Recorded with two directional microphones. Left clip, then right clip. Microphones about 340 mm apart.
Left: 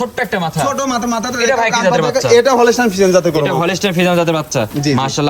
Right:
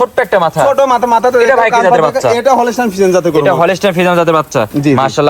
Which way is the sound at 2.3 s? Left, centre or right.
Right.